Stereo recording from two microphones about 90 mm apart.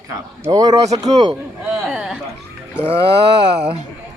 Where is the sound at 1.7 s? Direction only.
5° right (ahead or behind).